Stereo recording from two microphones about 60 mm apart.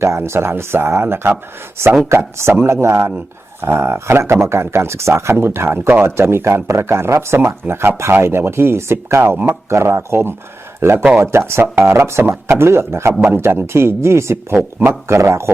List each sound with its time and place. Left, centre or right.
0.0 s speech: right